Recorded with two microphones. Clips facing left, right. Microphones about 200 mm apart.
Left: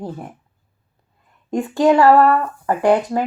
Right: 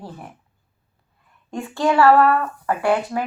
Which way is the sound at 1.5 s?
15° left (ahead or behind).